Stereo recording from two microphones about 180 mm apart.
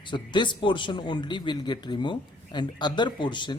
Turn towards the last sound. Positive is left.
turn(degrees=25)  # may be behind; listen again after turning